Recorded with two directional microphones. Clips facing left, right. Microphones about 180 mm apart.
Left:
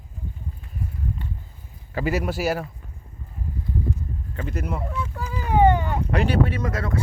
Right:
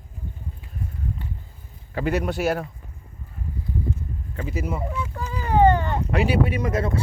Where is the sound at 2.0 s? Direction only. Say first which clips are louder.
Right 1 dB; centre (ahead or behind).